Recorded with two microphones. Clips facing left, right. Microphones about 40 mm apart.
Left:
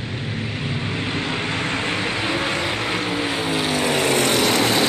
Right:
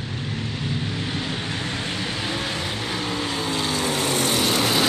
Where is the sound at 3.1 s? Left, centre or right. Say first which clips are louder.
Left 3 dB; left.